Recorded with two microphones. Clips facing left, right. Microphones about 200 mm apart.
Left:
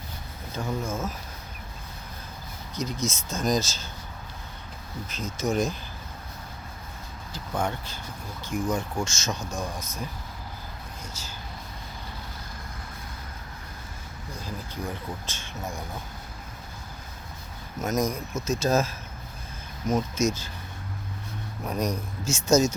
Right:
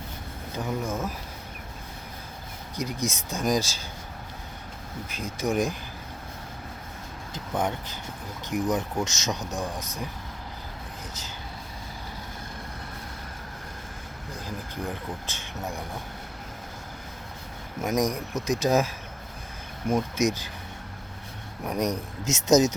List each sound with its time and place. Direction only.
0.5 s speech: 15° right (ahead or behind)
2.7 s speech: 15° right (ahead or behind)
5.0 s speech: 10° right (ahead or behind)
7.3 s speech: 20° right (ahead or behind)
15.3 s speech: 15° right (ahead or behind)
17.8 s speech: 15° right (ahead or behind)
21.6 s speech: 15° right (ahead or behind)